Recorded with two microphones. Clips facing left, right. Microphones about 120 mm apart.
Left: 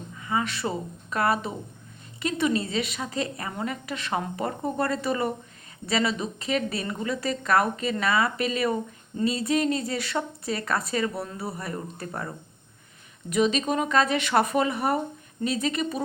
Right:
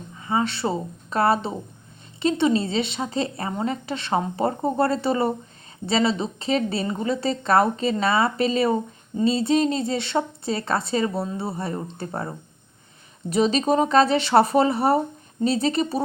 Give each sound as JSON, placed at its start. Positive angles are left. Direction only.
{"t": 0.2, "sound": "a woman's voice", "side_deg": -30}